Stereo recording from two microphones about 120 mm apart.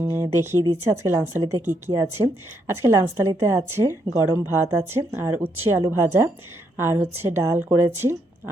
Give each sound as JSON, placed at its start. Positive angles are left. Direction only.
{"t": 0.0, "sound": "a woman's voice", "side_deg": -20}